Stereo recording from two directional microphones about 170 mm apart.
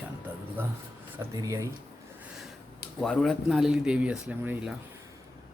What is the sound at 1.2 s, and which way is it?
Speech, 20° right (ahead or behind).